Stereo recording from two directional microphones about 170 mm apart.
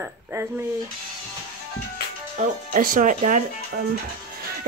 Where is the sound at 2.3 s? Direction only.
50° right (ahead or behind).